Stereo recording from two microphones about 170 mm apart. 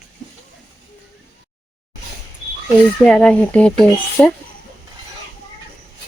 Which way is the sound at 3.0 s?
5° left (ahead or behind).